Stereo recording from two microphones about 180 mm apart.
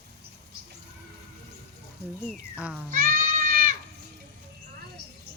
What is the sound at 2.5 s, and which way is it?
Speech, 5° right (ahead or behind).